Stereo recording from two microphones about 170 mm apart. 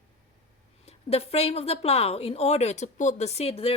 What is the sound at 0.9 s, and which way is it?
A woman's voice, 35° left (ahead or behind).